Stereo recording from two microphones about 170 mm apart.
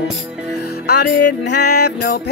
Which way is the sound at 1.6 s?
70° left (ahead or behind).